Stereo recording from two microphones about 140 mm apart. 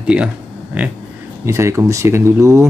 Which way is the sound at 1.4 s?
20° right (ahead or behind).